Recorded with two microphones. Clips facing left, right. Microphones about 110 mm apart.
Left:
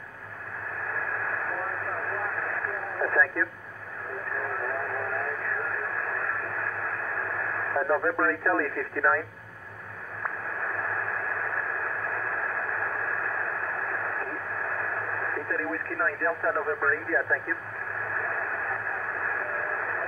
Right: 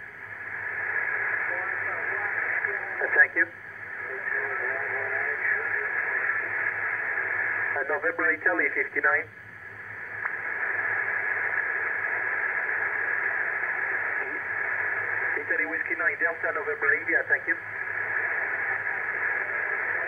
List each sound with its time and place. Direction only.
1.1 s radio: 25° left (ahead or behind)
10.6 s radio: 20° left (ahead or behind)